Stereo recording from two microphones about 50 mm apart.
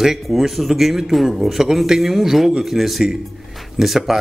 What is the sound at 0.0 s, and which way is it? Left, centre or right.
Speech, centre.